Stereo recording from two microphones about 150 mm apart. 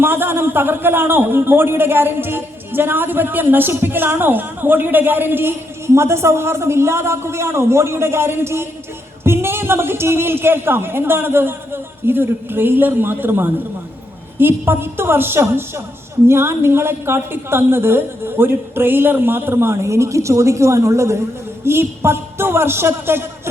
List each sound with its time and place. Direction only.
0.0 s a man's voice: 15° right (ahead or behind)